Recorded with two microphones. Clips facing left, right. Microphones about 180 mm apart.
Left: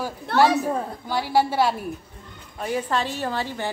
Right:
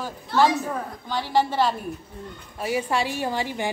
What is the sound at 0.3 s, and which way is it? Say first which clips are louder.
Speech: left 1 dB; 65° left (ahead or behind).